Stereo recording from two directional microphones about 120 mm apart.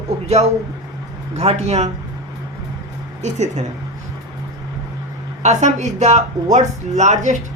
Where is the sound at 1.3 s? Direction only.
65° right (ahead or behind).